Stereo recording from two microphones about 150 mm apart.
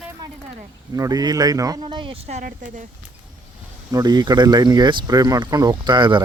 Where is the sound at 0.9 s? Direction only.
25° right (ahead or behind).